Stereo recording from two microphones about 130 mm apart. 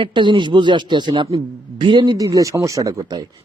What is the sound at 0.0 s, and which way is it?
Speech, 40° right (ahead or behind).